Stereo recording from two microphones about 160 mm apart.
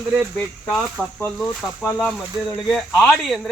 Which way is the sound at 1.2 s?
5° left (ahead or behind).